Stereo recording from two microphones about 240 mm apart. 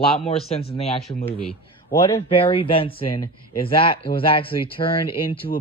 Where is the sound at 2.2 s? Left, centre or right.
Left.